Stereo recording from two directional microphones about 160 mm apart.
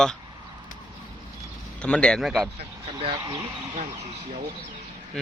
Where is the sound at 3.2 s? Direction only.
20° right (ahead or behind).